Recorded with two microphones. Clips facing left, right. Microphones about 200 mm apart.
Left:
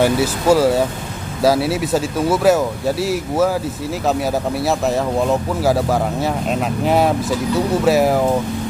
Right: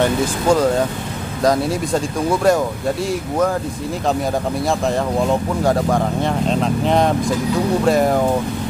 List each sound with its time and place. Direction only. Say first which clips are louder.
0.0 s speech: left 2 dB; 5° left (ahead or behind)
4.6 s speech: left 1 dB; 5° left (ahead or behind)